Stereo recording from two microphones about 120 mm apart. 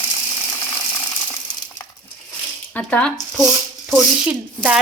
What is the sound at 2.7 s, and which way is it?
Speech, 10° left (ahead or behind).